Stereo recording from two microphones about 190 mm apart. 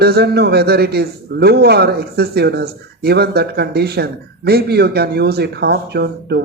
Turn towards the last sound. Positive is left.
turn(degrees=-60)  # may be behind; listen again after turning